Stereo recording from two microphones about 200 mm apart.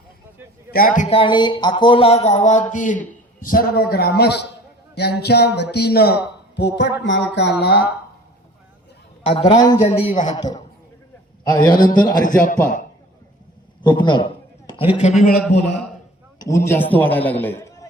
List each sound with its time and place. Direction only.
0.7 s a man's voice: 45° left (ahead or behind)
9.2 s a woman's voice: 30° left (ahead or behind)
9.8 s speech: 30° left (ahead or behind)
10.2 s a woman's voice: 20° left (ahead or behind)
13.8 s a man's voice: 25° left (ahead or behind); by 15.4 s 40° left (ahead or behind)
16.6 s a man's voice: 10° left (ahead or behind)